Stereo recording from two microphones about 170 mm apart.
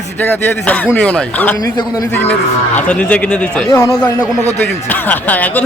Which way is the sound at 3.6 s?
20° left (ahead or behind).